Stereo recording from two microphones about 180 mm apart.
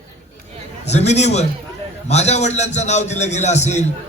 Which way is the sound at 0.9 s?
40° left (ahead or behind).